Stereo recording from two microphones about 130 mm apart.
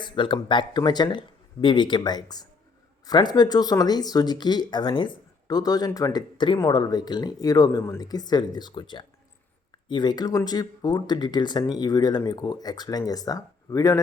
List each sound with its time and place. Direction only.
0.0 s speech: 40° left (ahead or behind)